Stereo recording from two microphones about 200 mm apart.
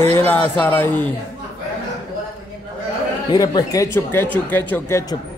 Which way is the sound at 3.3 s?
15° left (ahead or behind).